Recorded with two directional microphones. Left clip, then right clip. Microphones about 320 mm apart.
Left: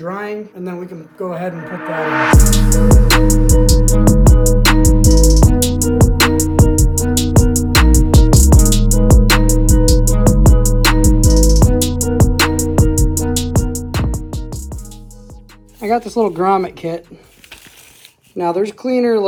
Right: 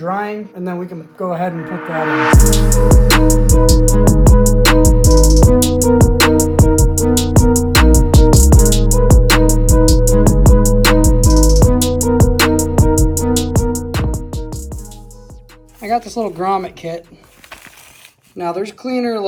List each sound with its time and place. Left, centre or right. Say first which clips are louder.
0.0 s speech: right 3 dB; centre
2.3 s music: right 1 dB; centre
16.5 s speech: left 3 dB; centre
18.5 s speech: left 6 dB; centre